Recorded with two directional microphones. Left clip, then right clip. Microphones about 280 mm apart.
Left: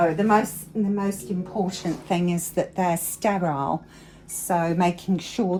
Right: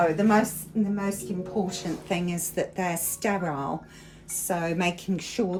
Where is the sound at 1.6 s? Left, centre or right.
Centre.